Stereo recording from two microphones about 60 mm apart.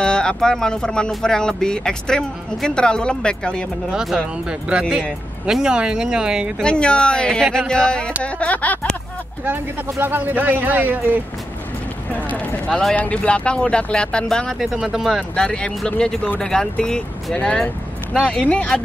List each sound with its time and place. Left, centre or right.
0.0 s speech: centre
3.9 s speech: centre
4.5 s speech: centre
6.6 s speech: centre
9.4 s speech: right
12.2 s a sound: left
12.9 s speech: left
14.6 s speech: centre
15.3 s speech: centre